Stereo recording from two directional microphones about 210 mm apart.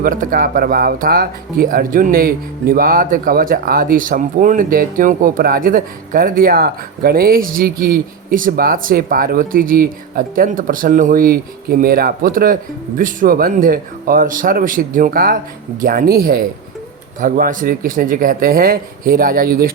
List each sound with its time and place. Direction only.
0.0 s speech: 40° right (ahead or behind)